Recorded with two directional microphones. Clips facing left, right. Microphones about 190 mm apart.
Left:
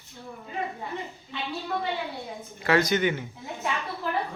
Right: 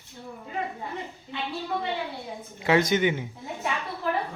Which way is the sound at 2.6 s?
20° right (ahead or behind).